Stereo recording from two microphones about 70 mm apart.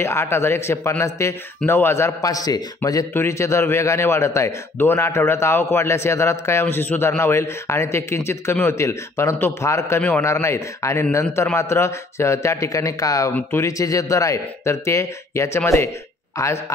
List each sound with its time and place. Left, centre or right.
0.0 s a man's voice: left
2.2 s speech: left
3.1 s a man's voice: left
9.9 s a man's voice: left
10.2 s a man's voice: left